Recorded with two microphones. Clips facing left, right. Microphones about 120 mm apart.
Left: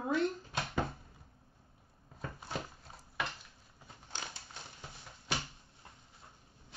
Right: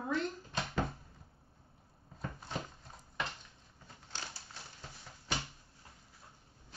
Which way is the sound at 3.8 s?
20° left (ahead or behind).